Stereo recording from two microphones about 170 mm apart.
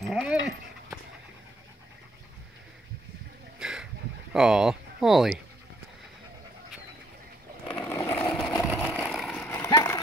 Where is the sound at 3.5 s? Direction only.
5° right (ahead or behind).